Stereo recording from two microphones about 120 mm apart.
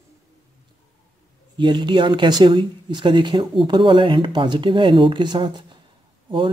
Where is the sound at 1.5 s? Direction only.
40° right (ahead or behind).